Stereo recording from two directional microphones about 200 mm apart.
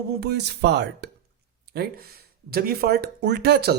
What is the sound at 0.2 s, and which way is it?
Speech, 55° right (ahead or behind).